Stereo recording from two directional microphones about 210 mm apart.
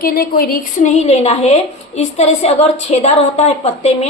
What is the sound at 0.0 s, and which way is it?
A woman's voice, 45° left (ahead or behind).